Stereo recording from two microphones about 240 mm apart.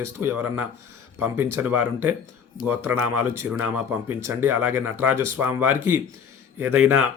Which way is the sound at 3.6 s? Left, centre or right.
Centre.